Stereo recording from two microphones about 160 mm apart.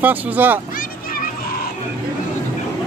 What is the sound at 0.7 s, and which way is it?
Children playing, 60° left (ahead or behind).